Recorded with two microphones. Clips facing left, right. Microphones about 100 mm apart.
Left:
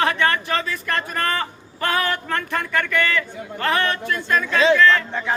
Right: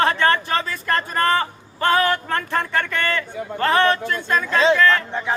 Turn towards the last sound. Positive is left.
turn(degrees=-30)  # may be behind; listen again after turning